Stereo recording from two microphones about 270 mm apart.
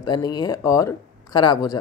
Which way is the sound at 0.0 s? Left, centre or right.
Centre.